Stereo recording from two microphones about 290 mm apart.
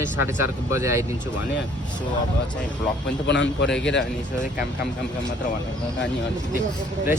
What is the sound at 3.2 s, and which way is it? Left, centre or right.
Speech, left.